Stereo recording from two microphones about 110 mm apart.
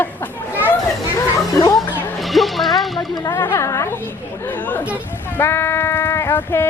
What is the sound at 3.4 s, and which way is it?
A woman's voice, 25° left (ahead or behind).